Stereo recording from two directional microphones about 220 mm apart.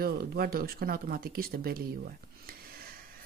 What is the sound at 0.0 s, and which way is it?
A woman's voice, 45° right (ahead or behind).